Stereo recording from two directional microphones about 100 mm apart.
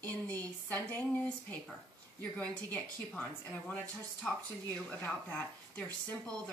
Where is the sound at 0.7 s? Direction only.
15° left (ahead or behind).